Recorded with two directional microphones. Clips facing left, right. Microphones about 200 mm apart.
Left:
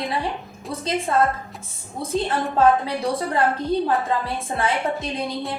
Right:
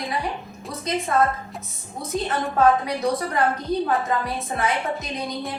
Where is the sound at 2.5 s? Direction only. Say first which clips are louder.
Left 1 dB; 30° left (ahead or behind).